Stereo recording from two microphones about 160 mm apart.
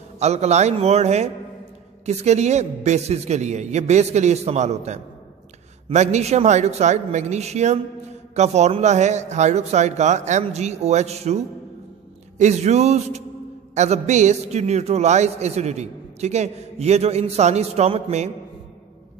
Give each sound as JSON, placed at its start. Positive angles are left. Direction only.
{"t": 0.2, "sound": "a man's voice", "side_deg": -45}